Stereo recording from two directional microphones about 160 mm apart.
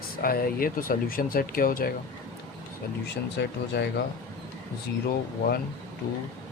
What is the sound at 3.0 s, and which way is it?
Speech, 90° left.